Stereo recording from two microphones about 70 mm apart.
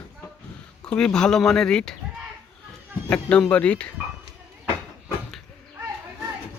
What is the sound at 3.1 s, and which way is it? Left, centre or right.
Speech, centre.